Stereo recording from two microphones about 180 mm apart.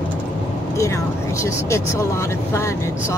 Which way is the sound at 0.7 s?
15° left (ahead or behind).